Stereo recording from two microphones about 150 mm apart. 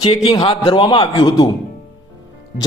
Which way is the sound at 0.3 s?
35° left (ahead or behind).